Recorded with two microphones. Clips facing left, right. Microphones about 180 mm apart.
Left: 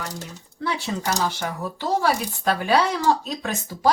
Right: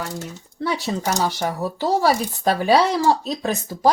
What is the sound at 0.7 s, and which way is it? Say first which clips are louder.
Speech: right 2 dB; 40° right (ahead or behind).